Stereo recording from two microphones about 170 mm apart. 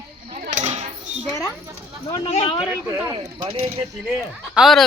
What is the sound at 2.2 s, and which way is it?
Speech, 35° left (ahead or behind).